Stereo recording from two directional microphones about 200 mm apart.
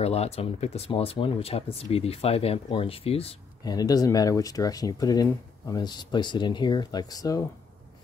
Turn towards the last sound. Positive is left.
turn(degrees=15)  # may be behind; listen again after turning